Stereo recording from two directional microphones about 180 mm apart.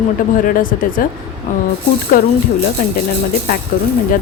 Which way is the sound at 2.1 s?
50° left (ahead or behind).